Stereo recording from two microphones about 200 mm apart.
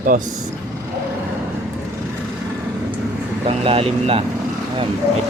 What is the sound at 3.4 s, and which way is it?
Speech, 30° right (ahead or behind).